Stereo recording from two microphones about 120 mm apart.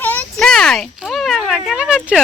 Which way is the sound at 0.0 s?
15° left (ahead or behind).